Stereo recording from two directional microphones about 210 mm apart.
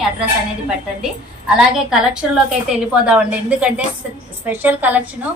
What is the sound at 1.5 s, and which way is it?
A woman's voice, 5° right (ahead or behind).